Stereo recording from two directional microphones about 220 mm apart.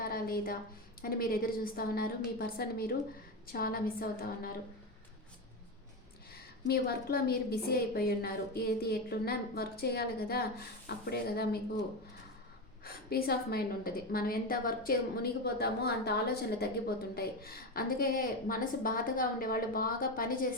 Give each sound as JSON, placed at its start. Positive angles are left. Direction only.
{"t": 0.0, "sound": "a sound", "side_deg": 45}
{"t": 1.0, "sound": "a woman's voice", "side_deg": 45}
{"t": 6.7, "sound": "a woman's voice", "side_deg": 45}